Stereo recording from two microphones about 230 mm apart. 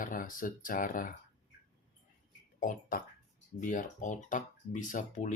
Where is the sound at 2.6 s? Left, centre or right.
Left.